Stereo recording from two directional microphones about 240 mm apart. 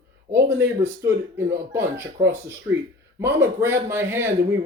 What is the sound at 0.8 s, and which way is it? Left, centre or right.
Speech, centre.